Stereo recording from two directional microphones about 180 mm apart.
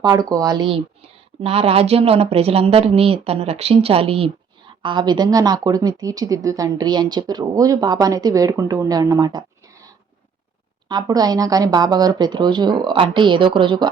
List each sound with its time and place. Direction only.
0.0 s speech: 20° right (ahead or behind)